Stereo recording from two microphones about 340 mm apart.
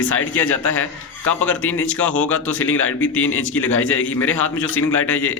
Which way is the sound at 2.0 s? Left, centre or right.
Centre.